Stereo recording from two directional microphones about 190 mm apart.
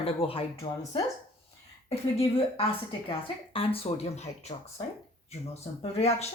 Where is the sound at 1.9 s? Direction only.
30° left (ahead or behind).